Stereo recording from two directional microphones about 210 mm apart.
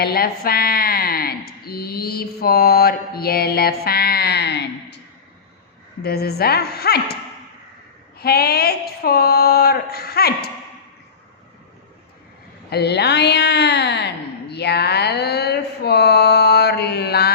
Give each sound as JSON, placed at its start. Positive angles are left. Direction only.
{"t": 0.0, "sound": "speech", "side_deg": 45}
{"t": 6.0, "sound": "speech", "side_deg": 50}
{"t": 8.2, "sound": "speech", "side_deg": 50}
{"t": 12.7, "sound": "speech", "side_deg": 50}